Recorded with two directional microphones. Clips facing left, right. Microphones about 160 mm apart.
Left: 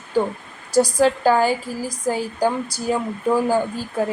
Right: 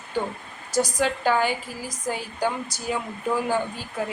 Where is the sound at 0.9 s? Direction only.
40° left (ahead or behind).